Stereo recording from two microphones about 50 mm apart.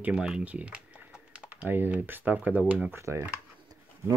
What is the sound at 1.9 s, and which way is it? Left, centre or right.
Speech, right.